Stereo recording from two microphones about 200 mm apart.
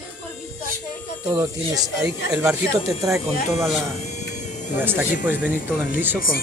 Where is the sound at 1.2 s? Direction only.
15° right (ahead or behind).